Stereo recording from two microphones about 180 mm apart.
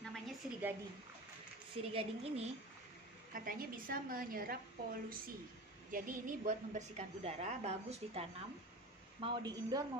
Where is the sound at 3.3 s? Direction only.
50° right (ahead or behind).